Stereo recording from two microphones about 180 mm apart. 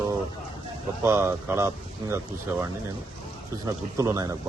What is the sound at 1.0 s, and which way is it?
Speech, 15° right (ahead or behind).